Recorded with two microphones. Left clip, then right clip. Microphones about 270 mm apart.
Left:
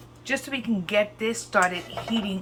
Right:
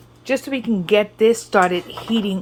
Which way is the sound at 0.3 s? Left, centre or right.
Centre.